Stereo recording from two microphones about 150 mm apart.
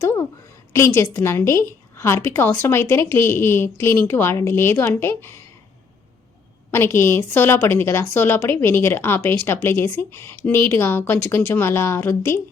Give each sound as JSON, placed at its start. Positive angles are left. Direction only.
{"t": 0.0, "sound": "a sound", "side_deg": 15}
{"t": 0.7, "sound": "a woman's voice", "side_deg": 15}
{"t": 6.7, "sound": "a woman's voice", "side_deg": 15}